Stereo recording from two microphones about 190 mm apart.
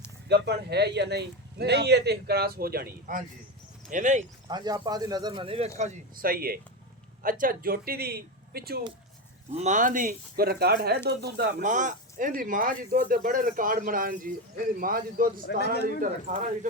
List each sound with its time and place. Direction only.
0.3 s speech: 60° right (ahead or behind); by 4.3 s 40° right (ahead or behind)
4.4 s speech: 20° right (ahead or behind); by 8.8 s 55° right (ahead or behind)
9.5 s speech: 35° right (ahead or behind); by 11.4 s 60° right (ahead or behind)
11.6 s speech: 40° right (ahead or behind)
15.4 s speech: 55° left (ahead or behind)
16.0 s speech: 40° right (ahead or behind)